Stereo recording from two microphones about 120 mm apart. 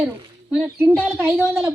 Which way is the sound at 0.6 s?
20° right (ahead or behind).